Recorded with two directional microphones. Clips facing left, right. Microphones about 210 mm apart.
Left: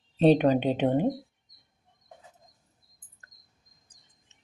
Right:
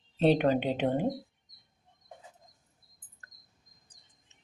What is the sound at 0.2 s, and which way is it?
Speech, 20° left (ahead or behind).